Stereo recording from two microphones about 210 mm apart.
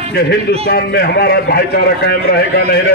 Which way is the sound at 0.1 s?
50° left (ahead or behind).